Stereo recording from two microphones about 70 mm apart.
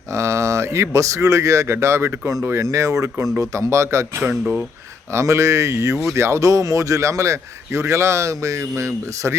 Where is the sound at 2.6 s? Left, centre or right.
Right.